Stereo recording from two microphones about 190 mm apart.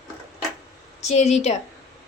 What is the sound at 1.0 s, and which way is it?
Speech, 35° left (ahead or behind).